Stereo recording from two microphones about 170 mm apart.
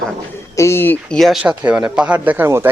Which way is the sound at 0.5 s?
15° left (ahead or behind).